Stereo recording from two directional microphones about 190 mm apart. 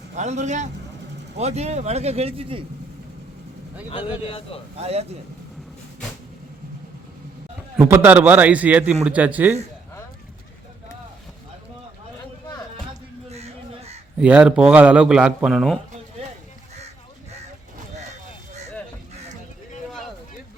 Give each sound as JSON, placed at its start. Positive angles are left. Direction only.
{"t": 0.2, "sound": "speech", "side_deg": -40}
{"t": 3.8, "sound": "speech", "side_deg": 25}
{"t": 4.8, "sound": "speech", "side_deg": -35}
{"t": 7.8, "sound": "a man's voice", "side_deg": -10}
{"t": 13.3, "sound": "crow", "side_deg": -35}
{"t": 14.2, "sound": "a man's voice", "side_deg": -5}